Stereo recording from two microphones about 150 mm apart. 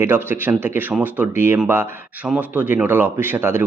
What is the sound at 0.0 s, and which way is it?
Speech, 15° right (ahead or behind).